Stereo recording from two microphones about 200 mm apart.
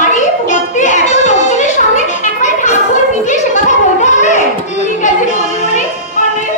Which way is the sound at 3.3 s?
35° left (ahead or behind).